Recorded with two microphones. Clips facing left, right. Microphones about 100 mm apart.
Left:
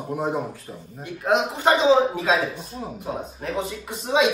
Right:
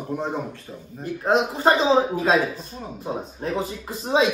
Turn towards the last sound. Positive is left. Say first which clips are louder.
# even
turn(degrees=-35)  # may be behind; listen again after turning